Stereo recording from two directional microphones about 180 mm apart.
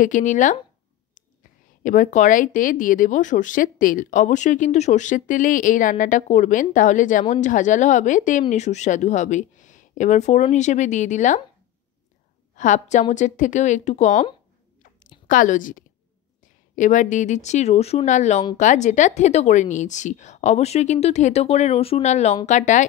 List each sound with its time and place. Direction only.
0.0 s speech: 45° left (ahead or behind)
1.8 s speech: 45° left (ahead or behind)
12.5 s a woman's voice: 45° left (ahead or behind)
15.2 s a woman's voice: 45° left (ahead or behind)